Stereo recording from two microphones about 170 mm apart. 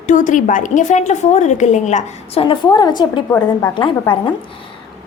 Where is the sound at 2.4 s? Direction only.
25° left (ahead or behind).